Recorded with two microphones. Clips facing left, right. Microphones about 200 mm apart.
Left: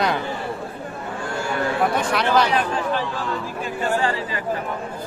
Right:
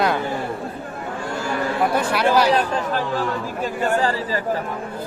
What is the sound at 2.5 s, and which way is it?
Speech, 40° right (ahead or behind).